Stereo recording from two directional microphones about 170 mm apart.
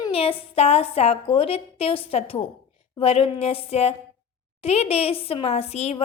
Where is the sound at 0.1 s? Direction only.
35° left (ahead or behind).